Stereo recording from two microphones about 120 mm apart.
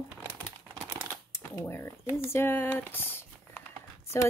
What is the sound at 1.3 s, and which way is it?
Speech, 20° left (ahead or behind).